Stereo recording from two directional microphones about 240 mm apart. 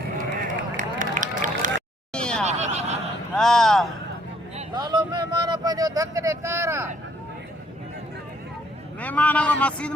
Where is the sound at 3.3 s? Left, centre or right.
Centre.